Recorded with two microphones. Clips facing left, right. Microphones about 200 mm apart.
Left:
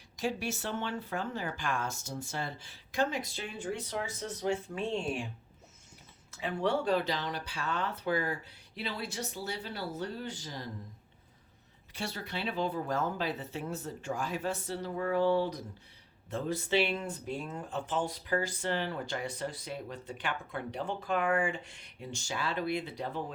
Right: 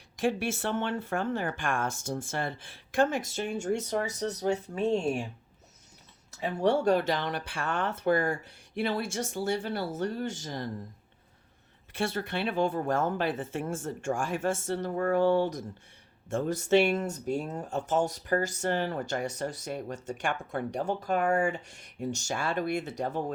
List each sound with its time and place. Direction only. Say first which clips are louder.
0.2 s speech: right 5 dB; 55° right (ahead or behind)
6.3 s speech: right 5 dB; 40° right (ahead or behind)
11.9 s speech: right 7 dB; 50° right (ahead or behind)